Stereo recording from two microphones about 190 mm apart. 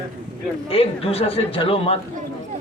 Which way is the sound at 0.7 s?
30° left (ahead or behind).